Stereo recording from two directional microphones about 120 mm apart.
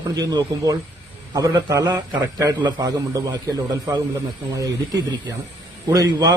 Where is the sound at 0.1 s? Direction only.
30° right (ahead or behind).